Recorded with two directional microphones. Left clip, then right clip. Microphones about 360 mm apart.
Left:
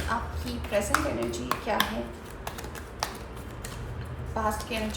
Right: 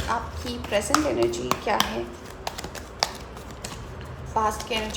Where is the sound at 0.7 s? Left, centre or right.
Right.